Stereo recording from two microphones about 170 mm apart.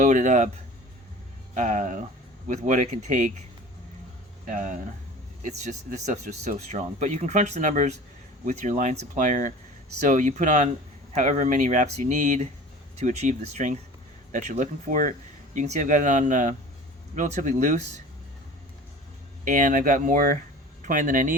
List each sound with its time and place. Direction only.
0.0 s speech: 45° right (ahead or behind)
1.5 s speech: 50° right (ahead or behind)
4.4 s speech: 50° right (ahead or behind)
19.5 s speech: 50° right (ahead or behind)